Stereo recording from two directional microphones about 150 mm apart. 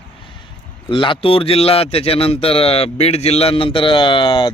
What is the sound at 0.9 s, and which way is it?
A man's voice, 35° left (ahead or behind).